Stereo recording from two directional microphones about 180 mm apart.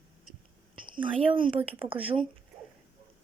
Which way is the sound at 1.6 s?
10° right (ahead or behind).